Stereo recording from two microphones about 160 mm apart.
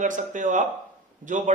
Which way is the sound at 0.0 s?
55° right (ahead or behind).